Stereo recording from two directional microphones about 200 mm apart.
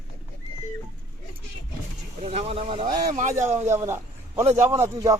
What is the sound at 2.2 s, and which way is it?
Speech, 30° right (ahead or behind).